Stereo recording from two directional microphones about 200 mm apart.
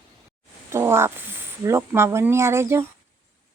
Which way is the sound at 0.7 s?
10° right (ahead or behind).